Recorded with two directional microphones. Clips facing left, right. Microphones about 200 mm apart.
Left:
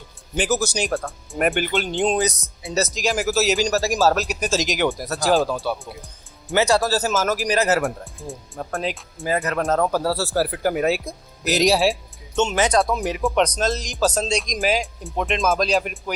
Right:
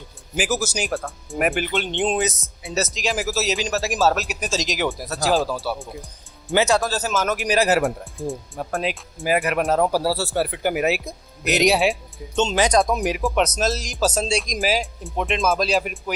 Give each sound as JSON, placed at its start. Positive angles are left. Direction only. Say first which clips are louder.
{"t": 0.3, "sound": "speech", "louder": "left 2 dB", "side_deg": -5}
{"t": 6.5, "sound": "speech", "louder": "even", "side_deg": -15}
{"t": 6.8, "sound": "speech", "louder": "left 2 dB", "side_deg": 5}
{"t": 7.4, "sound": "speech", "louder": "right 4 dB", "side_deg": -10}
{"t": 9.3, "sound": "speech", "louder": "right 1 dB", "side_deg": -15}
{"t": 12.5, "sound": "speech", "louder": "right 2 dB", "side_deg": -15}
{"t": 13.2, "sound": "speech", "louder": "left 3 dB", "side_deg": -5}